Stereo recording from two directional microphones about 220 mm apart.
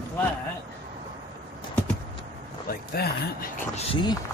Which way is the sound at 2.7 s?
45° left (ahead or behind).